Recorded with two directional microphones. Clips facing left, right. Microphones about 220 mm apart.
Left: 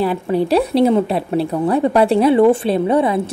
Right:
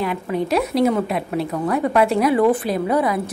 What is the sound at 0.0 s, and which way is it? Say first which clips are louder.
Speech: left 5 dB; 30° left (ahead or behind).